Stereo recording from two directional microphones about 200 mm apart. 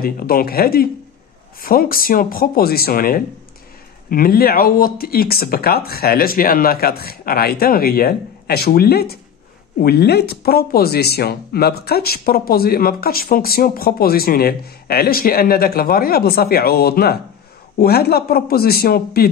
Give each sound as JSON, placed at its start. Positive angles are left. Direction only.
{"t": 0.0, "sound": "speech", "side_deg": 45}